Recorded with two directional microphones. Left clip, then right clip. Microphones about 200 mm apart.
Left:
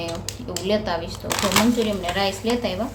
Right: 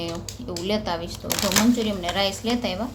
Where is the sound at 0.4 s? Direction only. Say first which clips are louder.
Left 3 dB; 15° right (ahead or behind).